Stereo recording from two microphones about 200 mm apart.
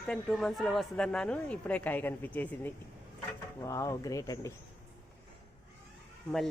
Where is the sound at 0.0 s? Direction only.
Centre (ahead or behind).